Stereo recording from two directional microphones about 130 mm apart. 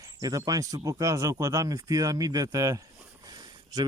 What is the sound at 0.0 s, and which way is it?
A man's voice, 30° right (ahead or behind).